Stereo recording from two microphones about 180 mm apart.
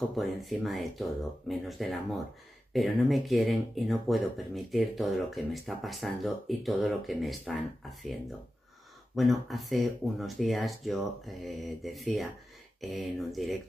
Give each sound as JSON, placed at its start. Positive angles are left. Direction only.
{"t": 0.1, "sound": "speech", "side_deg": 0}
{"t": 9.1, "sound": "speech", "side_deg": 0}